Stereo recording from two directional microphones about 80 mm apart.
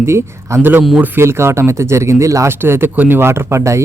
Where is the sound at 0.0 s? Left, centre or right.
Right.